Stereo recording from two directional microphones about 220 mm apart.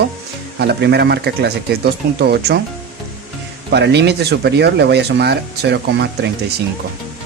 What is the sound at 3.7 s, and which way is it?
Speech, 50° right (ahead or behind).